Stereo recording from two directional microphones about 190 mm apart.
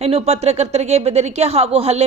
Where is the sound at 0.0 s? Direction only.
30° right (ahead or behind).